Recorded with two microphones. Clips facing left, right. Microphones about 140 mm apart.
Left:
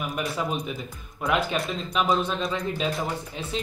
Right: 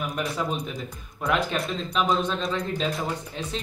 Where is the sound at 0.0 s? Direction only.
5° left (ahead or behind).